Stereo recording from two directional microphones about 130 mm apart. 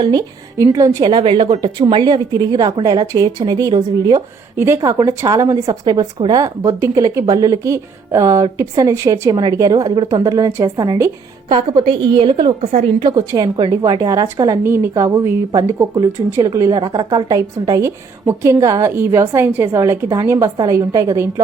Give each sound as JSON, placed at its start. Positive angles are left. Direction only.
{"t": 0.0, "sound": "a woman's voice", "side_deg": -30}
{"t": 1.1, "sound": "a woman's voice", "side_deg": -40}
{"t": 4.5, "sound": "a woman's voice", "side_deg": -20}
{"t": 11.9, "sound": "a woman's voice", "side_deg": -40}
{"t": 13.0, "sound": "a woman's voice", "side_deg": -30}